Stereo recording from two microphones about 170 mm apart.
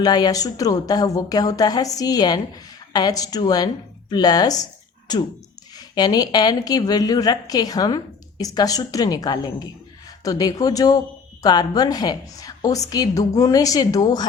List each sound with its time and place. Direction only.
0.0 s a woman's voice: 25° left (ahead or behind)